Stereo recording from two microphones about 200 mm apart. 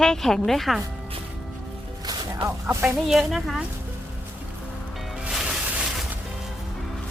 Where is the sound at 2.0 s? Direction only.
20° right (ahead or behind).